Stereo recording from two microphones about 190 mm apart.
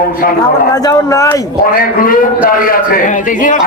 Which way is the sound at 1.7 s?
50° left (ahead or behind).